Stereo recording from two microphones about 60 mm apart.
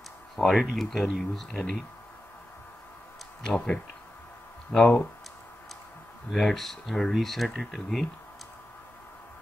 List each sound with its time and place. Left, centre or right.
0.4 s speech: centre
3.5 s speech: left
4.7 s speech: centre
6.3 s speech: centre